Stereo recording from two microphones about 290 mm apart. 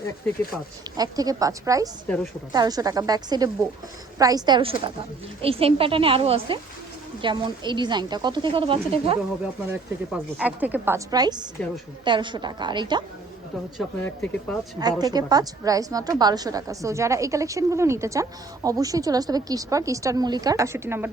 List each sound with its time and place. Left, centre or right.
0.9 s a woman's voice: centre
10.1 s a woman's voice: centre
13.7 s speech: centre
14.8 s a woman's voice: centre